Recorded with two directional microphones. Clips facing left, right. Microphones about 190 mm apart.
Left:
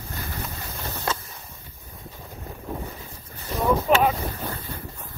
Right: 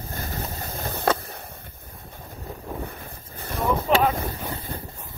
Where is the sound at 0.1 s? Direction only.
45° right (ahead or behind).